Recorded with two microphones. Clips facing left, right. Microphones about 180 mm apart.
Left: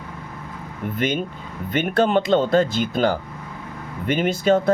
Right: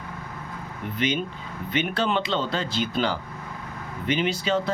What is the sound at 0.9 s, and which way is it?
Speech, 50° left (ahead or behind).